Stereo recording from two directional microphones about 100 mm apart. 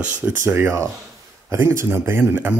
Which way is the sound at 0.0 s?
15° right (ahead or behind).